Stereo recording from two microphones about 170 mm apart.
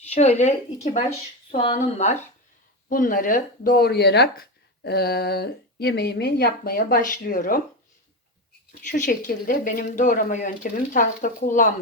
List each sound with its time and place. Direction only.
0.1 s speech: 40° left (ahead or behind)
2.9 s speech: 55° left (ahead or behind)
8.9 s speech: 50° left (ahead or behind)